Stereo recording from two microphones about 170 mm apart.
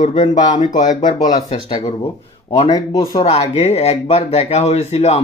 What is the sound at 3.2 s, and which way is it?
Speech, 35° left (ahead or behind).